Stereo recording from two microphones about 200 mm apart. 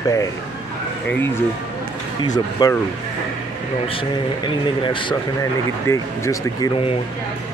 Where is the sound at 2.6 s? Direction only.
20° left (ahead or behind).